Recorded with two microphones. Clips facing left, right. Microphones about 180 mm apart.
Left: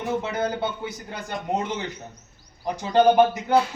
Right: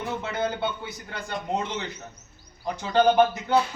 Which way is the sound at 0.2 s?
15° left (ahead or behind).